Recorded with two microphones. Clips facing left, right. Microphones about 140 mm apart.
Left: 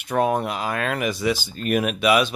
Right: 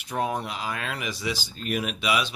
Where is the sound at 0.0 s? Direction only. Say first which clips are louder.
Left 7 dB; 60° left (ahead or behind).